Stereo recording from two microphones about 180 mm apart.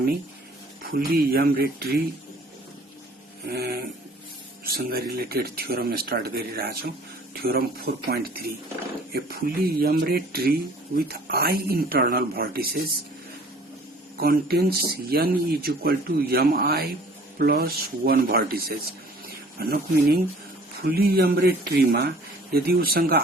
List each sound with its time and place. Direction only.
0.9 s speech: 55° right (ahead or behind)
3.4 s a sound: 60° right (ahead or behind)
4.6 s speech: 60° right (ahead or behind)
14.2 s speech: 60° right (ahead or behind)